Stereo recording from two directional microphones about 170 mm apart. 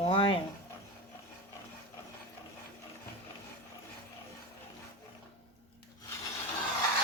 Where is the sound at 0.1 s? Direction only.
30° left (ahead or behind).